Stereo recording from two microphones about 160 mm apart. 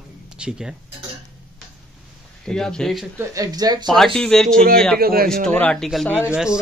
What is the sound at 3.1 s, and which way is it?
Speech, 20° right (ahead or behind).